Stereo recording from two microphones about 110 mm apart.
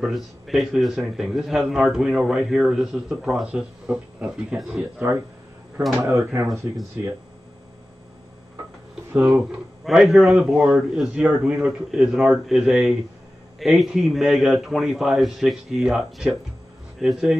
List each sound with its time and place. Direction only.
0.0 s a man's voice: centre (ahead or behind)
6.1 s speech: 25° right (ahead or behind)
9.1 s a man's voice: 10° right (ahead or behind)